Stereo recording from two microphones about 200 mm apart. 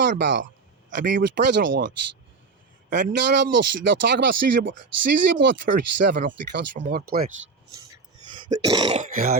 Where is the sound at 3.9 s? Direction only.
65° right (ahead or behind).